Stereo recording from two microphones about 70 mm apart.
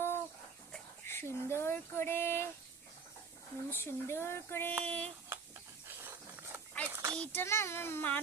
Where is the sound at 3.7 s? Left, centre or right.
Left.